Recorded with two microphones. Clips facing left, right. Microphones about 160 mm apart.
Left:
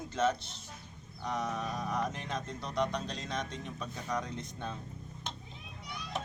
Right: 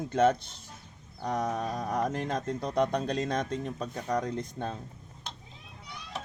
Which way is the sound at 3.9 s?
55° right (ahead or behind).